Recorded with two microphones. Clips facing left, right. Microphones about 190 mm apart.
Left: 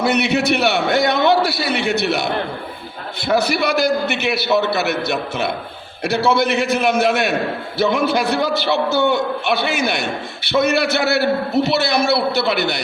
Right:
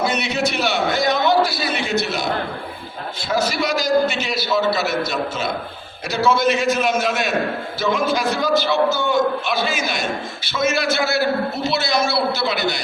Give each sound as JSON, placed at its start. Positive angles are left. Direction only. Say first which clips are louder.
{"t": 0.0, "sound": "a man's voice", "louder": "left 4 dB", "side_deg": 60}